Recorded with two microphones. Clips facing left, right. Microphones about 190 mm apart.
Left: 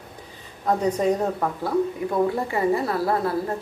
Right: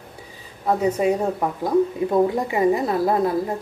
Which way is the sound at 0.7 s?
5° right (ahead or behind).